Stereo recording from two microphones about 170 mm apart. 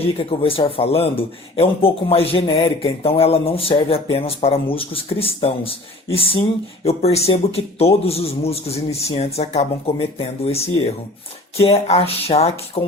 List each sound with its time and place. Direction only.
0.0 s a man's voice: 35° left (ahead or behind)